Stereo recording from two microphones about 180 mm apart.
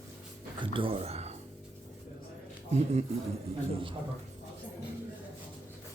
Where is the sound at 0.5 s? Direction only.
30° right (ahead or behind).